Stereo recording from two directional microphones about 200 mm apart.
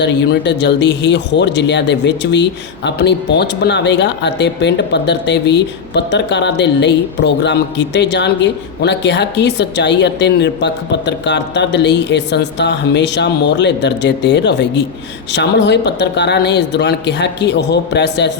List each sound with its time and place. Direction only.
0.0 s speech: 60° left (ahead or behind)